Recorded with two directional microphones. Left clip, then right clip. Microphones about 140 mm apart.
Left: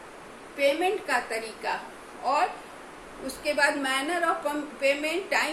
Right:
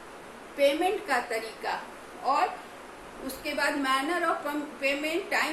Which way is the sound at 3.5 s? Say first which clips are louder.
Left 3 dB; 30° left (ahead or behind).